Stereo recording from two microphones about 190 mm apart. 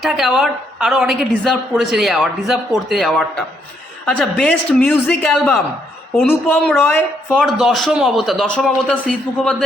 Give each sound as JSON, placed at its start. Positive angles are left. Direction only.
{"t": 0.0, "sound": "a woman's voice", "side_deg": 0}